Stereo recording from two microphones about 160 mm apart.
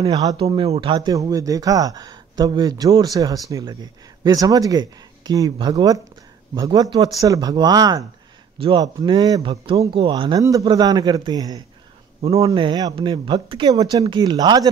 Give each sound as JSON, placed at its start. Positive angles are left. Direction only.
{"t": 0.0, "sound": "speech", "side_deg": -25}
{"t": 12.2, "sound": "speech", "side_deg": -35}